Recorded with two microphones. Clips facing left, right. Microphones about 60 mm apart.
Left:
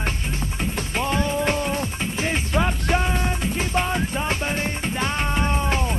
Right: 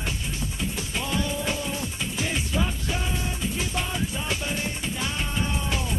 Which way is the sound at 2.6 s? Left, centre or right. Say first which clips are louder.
Left 8 dB; left.